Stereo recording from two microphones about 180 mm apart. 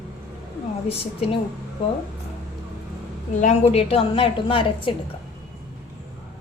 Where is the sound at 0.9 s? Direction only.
30° left (ahead or behind).